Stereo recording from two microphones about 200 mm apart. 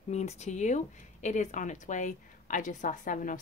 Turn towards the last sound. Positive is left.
turn(degrees=40)  # may be behind; listen again after turning